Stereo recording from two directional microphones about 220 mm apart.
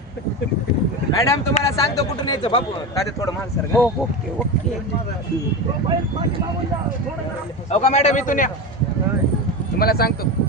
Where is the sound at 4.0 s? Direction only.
Centre (ahead or behind).